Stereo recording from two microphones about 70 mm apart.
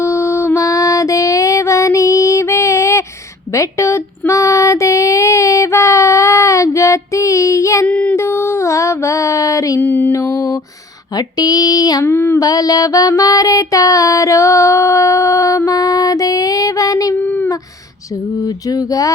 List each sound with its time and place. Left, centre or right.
0.0 s female singing: left
3.5 s a sound: left
4.3 s child singing: left
7.9 s music: centre
8.1 s a sound: left
9.8 s music: left
10.1 s mantra: left
11.1 s female singing: left
12.0 s female singing: left
12.4 s a sound: left
17.2 s a sound: left
18.4 s mantra: left